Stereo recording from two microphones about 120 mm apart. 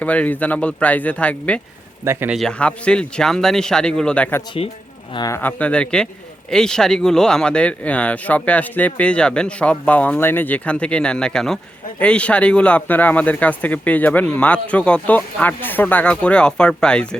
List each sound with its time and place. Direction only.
0.0 s speech: 10° left (ahead or behind)
2.0 s speech: 25° right (ahead or behind)
2.5 s speech: 10° left (ahead or behind)